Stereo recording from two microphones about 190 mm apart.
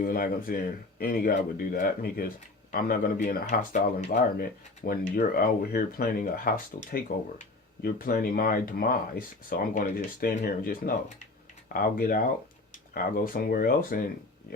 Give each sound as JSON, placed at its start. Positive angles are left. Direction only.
{"t": 0.0, "sound": "speech", "side_deg": 50}